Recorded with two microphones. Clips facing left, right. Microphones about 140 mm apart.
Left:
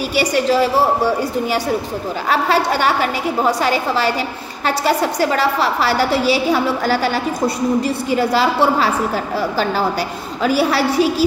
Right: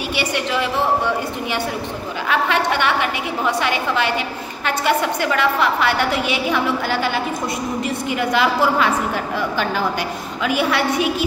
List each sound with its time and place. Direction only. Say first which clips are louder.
0.1 s a woman's voice: left 7 dB; 40° left (ahead or behind)